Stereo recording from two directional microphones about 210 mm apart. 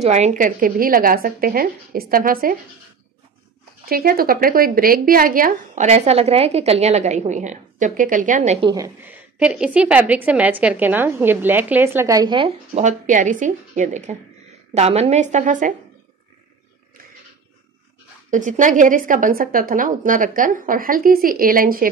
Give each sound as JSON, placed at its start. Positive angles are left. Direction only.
{"t": 0.0, "sound": "a woman's voice", "side_deg": -30}
{"t": 3.9, "sound": "a woman's voice", "side_deg": -45}
{"t": 8.6, "sound": "a woman's voice", "side_deg": -15}
{"t": 18.3, "sound": "a woman's voice", "side_deg": -35}